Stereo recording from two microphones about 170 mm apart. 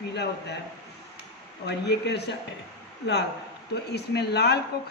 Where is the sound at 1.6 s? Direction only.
80° left.